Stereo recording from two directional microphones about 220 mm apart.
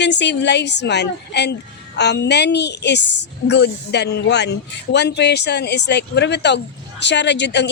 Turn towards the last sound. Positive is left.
turn(degrees=50)  # may be behind; listen again after turning